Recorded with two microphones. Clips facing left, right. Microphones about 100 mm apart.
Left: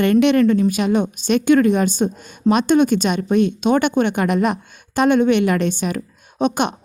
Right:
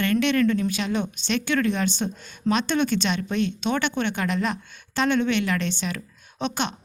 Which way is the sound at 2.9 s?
45° left (ahead or behind).